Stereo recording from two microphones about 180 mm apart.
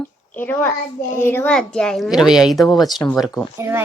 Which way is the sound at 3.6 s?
15° right (ahead or behind).